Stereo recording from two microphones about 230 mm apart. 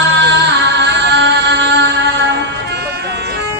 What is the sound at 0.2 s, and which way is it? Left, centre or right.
Music, right.